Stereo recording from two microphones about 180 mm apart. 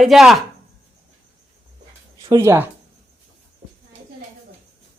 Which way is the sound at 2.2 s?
15° right (ahead or behind).